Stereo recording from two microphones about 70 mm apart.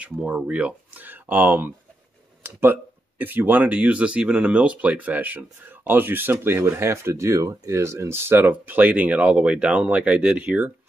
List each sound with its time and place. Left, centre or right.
0.2 s speech: centre